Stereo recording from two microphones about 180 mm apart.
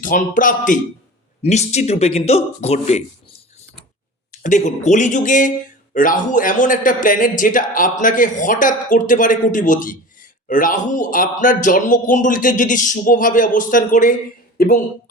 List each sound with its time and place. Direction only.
0.0 s speech: 45° left (ahead or behind)
4.3 s speech: 45° left (ahead or behind)